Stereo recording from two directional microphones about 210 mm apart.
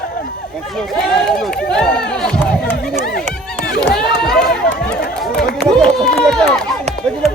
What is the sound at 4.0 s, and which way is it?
Run, centre (ahead or behind).